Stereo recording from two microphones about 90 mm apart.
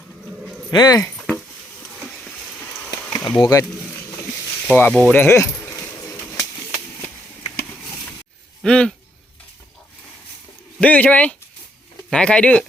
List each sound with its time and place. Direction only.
0.7 s speech: 50° left (ahead or behind)
3.1 s speech: 45° left (ahead or behind)
4.7 s speech: 15° left (ahead or behind)
5.1 s keys jangling: 25° left (ahead or behind)
6.0 s a sound: 35° left (ahead or behind)
8.6 s speech: 10° left (ahead or behind)
10.8 s speech: 15° left (ahead or behind)